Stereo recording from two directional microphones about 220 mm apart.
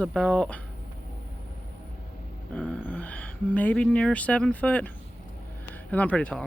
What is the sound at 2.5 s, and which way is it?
Speech, 5° left (ahead or behind).